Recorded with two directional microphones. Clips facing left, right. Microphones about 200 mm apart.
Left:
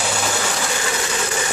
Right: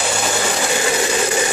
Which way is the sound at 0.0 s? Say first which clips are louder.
Right 3 dB; 5° right (ahead or behind).